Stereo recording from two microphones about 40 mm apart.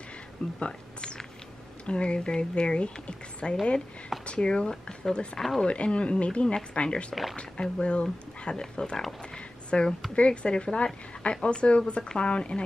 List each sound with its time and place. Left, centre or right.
0.6 s a woman's voice: left
9.3 s a sound: left
10.1 s a woman's voice: left